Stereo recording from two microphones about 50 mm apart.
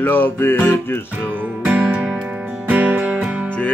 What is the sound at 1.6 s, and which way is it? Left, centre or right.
Music, centre.